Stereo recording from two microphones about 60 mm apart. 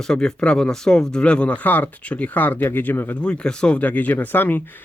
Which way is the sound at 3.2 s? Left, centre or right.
Centre.